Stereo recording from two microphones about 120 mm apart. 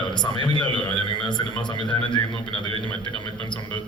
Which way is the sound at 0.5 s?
40° left (ahead or behind).